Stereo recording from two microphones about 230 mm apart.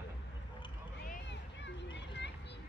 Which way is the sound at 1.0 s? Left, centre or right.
Left.